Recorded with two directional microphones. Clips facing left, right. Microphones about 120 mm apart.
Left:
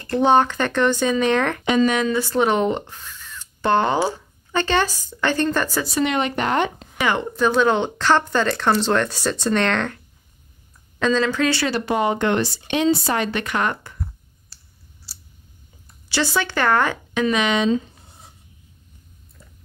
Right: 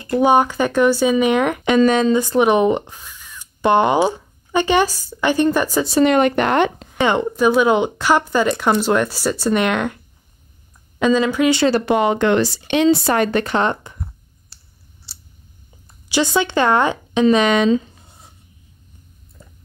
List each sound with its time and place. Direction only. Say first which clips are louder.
0.1 s speech: right 2 dB; 10° right (ahead or behind)
1.9 s speech: right 5 dB; 30° right (ahead or behind)
2.1 s speech: right 4 dB; 15° right (ahead or behind)
6.0 s speech: right 8 dB; 55° right (ahead or behind)
7.0 s speech: right 4 dB; 25° right (ahead or behind)
7.3 s speech: right 3 dB; 10° right (ahead or behind)
11.0 s speech: right 4 dB; 15° right (ahead or behind)
11.8 s speech: right 4 dB; 80° right; by 13.4 s 55° right (ahead or behind)
13.4 s speech: right 5 dB; 30° right (ahead or behind)
14.5 s scissors: even; 25° right (ahead or behind)
16.1 s speech: right 4 dB; 20° right (ahead or behind)
17.3 s speech: right 6 dB; 40° right (ahead or behind)